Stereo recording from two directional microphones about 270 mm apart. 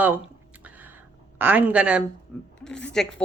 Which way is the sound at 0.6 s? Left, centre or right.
Centre.